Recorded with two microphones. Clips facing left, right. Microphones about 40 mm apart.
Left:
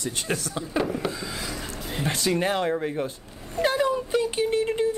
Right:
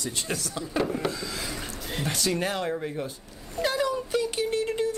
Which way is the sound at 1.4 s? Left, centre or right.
Centre.